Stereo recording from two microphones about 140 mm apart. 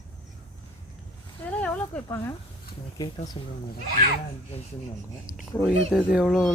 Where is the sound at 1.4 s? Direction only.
10° left (ahead or behind).